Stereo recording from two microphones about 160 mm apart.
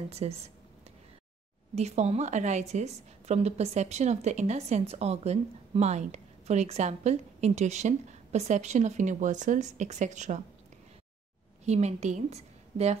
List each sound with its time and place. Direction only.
0.1 s speech: 40° right (ahead or behind)
1.8 s a woman's voice: 45° right (ahead or behind)
11.6 s a woman's voice: 45° right (ahead or behind)